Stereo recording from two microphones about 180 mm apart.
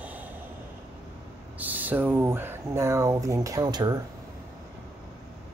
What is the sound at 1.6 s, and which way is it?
Speech, 10° right (ahead or behind).